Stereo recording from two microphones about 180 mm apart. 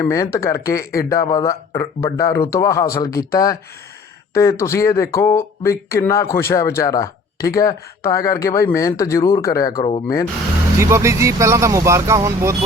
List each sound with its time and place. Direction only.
0.0 s speech: 15° left (ahead or behind)
10.8 s speech: 15° right (ahead or behind)